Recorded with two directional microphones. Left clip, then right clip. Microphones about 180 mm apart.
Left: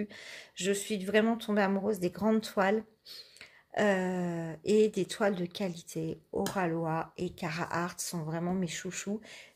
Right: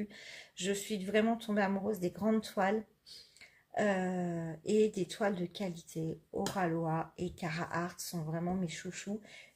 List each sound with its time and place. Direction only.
0.0 s speech: 25° left (ahead or behind)